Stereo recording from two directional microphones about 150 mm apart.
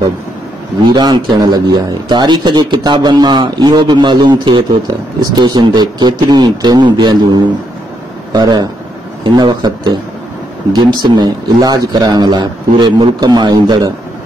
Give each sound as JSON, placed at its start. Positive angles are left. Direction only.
{"t": 0.8, "sound": "speech", "side_deg": -30}